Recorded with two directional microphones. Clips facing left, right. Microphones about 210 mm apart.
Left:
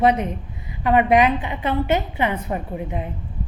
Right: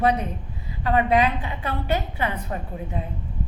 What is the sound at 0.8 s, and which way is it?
A woman's voice, 20° left (ahead or behind).